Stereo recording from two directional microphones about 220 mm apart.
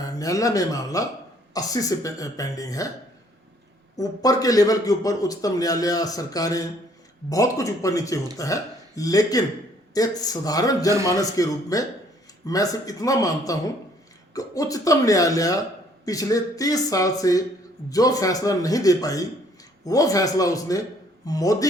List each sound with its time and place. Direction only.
0.0 s a man's voice: 15° left (ahead or behind)
3.9 s a man's voice: 15° left (ahead or behind)